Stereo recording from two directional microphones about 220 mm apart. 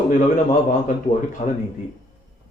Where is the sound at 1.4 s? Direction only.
35° left (ahead or behind).